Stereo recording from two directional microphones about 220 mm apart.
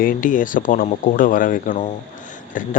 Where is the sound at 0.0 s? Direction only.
40° left (ahead or behind).